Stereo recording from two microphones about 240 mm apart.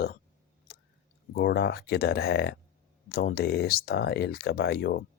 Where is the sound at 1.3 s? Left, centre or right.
Left.